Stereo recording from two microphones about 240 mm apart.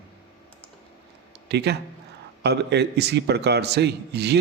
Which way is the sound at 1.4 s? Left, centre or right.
Right.